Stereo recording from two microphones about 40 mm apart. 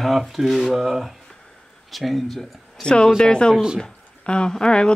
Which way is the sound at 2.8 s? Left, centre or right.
Left.